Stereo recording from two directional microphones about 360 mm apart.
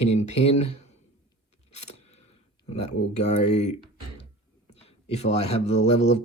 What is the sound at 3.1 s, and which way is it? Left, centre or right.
Speech, centre.